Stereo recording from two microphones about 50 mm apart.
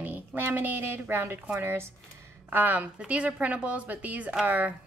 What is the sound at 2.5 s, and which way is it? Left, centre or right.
Speech, right.